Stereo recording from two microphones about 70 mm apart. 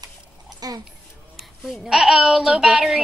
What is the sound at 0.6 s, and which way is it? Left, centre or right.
Speech, right.